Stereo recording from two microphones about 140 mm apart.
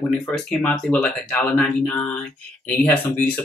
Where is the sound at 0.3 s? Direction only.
5° left (ahead or behind).